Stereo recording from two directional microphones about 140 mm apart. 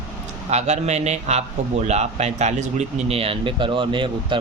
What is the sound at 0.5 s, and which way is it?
A man's voice, 55° right (ahead or behind).